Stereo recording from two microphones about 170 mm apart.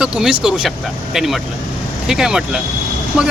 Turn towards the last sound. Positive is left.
turn(degrees=-5)  # may be behind; listen again after turning